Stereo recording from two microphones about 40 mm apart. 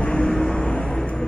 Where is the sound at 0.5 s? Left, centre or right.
Left.